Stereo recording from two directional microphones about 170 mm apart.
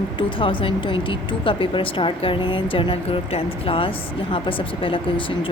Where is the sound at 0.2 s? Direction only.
30° left (ahead or behind).